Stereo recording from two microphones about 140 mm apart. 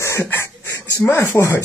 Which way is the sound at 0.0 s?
20° left (ahead or behind).